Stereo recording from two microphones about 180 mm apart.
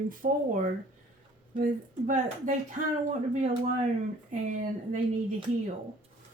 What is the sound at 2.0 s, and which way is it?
Speech, 45° right (ahead or behind).